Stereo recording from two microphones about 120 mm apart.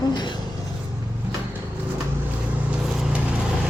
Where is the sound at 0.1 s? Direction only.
35° left (ahead or behind).